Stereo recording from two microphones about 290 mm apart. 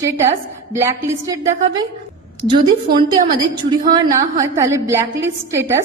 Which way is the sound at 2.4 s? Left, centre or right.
Centre.